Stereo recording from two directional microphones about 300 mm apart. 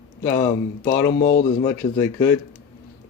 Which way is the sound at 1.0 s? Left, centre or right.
Left.